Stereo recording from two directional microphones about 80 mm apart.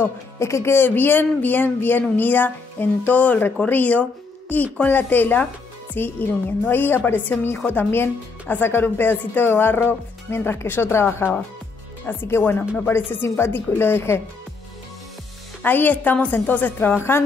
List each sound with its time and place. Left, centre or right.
0.0 s speech: left
15.6 s speech: left